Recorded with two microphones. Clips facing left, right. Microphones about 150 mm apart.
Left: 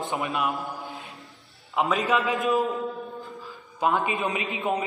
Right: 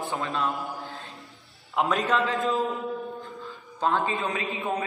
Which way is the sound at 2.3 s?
15° left (ahead or behind).